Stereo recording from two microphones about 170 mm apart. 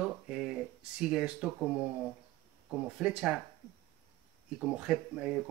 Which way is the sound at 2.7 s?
5° right (ahead or behind).